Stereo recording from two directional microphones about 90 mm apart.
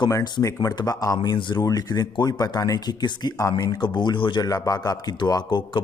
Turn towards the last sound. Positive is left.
turn(degrees=55)  # may be behind; listen again after turning